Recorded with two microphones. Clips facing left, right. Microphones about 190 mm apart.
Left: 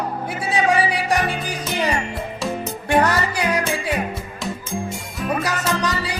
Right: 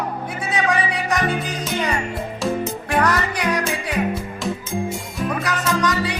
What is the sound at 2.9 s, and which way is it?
Music, 30° left (ahead or behind).